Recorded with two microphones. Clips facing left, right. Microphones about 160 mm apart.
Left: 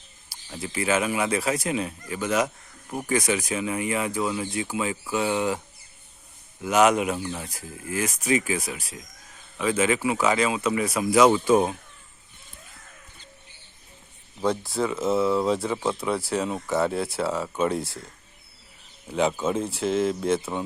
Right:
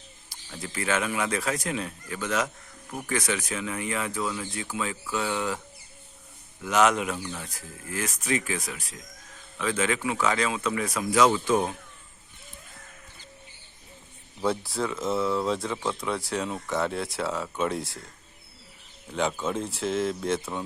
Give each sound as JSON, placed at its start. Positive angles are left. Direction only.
{"t": 0.3, "sound": "speech", "side_deg": 10}
{"t": 6.6, "sound": "speech", "side_deg": 10}
{"t": 7.2, "sound": "speech", "side_deg": 25}
{"t": 7.5, "sound": "speech", "side_deg": 10}
{"t": 14.4, "sound": "speech", "side_deg": -5}
{"t": 19.1, "sound": "speech", "side_deg": 5}